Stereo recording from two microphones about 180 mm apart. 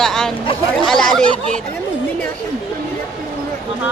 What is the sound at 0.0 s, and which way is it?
Speech, 5° left (ahead or behind).